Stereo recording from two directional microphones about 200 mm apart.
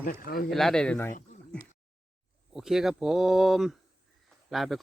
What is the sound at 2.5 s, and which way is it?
Speech, centre (ahead or behind).